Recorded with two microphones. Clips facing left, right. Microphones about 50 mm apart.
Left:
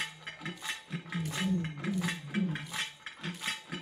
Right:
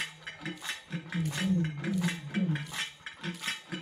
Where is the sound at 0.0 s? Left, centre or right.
Centre.